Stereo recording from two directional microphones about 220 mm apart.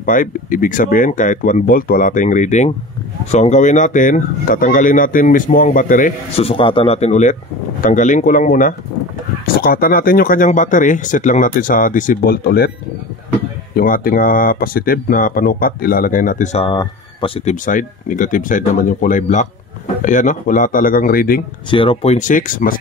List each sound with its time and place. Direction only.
0.0 s speech: 35° left (ahead or behind)
13.7 s speech: 40° left (ahead or behind)
16.6 s speech: 20° left (ahead or behind)
17.5 s speech: 35° left (ahead or behind)
21.6 s speech: 25° left (ahead or behind)